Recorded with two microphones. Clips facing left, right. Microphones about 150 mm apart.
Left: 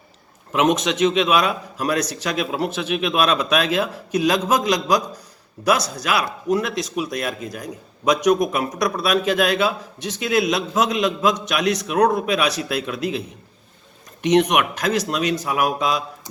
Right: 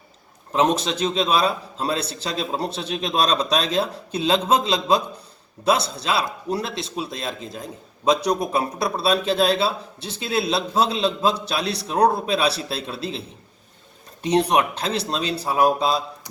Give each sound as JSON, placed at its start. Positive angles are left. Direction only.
{"t": 0.5, "sound": "a man's voice", "side_deg": -30}